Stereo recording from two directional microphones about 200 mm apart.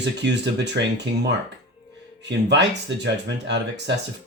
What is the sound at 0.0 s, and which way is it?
Speech, 60° right (ahead or behind).